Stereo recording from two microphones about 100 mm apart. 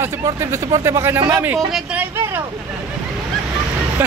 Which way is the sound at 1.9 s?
25° right (ahead or behind).